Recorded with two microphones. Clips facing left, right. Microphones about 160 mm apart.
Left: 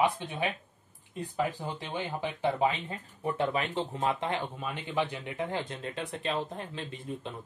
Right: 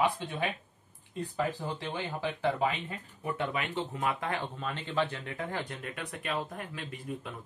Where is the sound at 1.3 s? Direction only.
15° left (ahead or behind).